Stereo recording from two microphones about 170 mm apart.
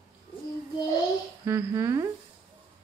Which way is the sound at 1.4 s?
15° right (ahead or behind).